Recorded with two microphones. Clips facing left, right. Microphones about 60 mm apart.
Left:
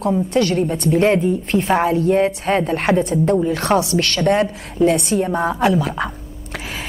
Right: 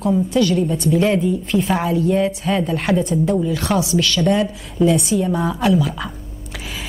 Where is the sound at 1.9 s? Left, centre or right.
Left.